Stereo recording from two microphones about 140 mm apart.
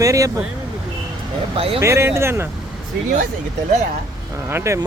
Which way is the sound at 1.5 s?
45° right (ahead or behind).